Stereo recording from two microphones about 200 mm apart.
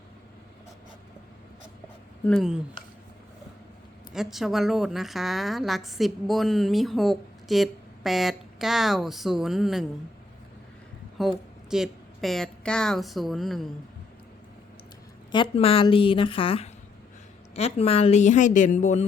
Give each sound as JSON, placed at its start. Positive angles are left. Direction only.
{"t": 2.2, "sound": "a woman's voice", "side_deg": 0}
{"t": 4.1, "sound": "a woman's voice", "side_deg": 0}
{"t": 11.2, "sound": "a woman's voice", "side_deg": 0}
{"t": 15.3, "sound": "a woman's voice", "side_deg": 25}